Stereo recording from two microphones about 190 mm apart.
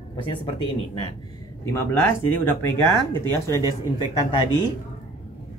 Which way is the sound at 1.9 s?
10° left (ahead or behind).